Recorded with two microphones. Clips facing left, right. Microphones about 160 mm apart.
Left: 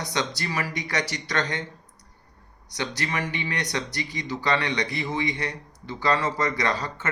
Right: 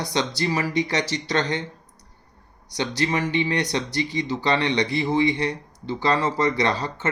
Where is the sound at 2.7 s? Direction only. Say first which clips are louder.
Right 6 dB; 30° right (ahead or behind).